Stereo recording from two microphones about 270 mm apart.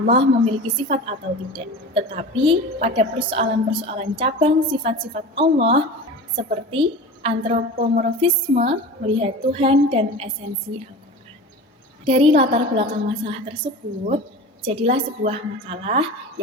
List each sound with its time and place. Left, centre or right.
0.0 s a woman's voice: right
12.0 s a woman's voice: right
14.6 s a woman's voice: right